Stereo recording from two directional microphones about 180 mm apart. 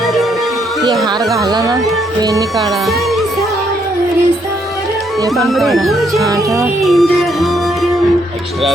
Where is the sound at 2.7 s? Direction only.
Centre (ahead or behind).